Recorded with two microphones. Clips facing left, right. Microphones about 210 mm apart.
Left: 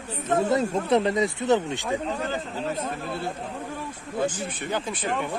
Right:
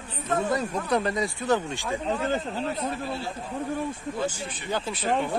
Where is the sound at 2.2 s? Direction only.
45° left (ahead or behind).